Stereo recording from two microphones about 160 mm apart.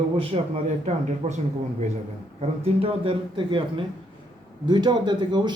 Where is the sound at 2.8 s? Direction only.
35° right (ahead or behind).